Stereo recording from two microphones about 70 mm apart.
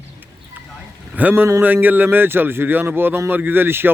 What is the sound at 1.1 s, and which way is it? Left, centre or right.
Speech, right.